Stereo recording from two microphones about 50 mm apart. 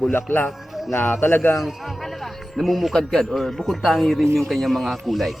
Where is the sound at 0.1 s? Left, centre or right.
Left.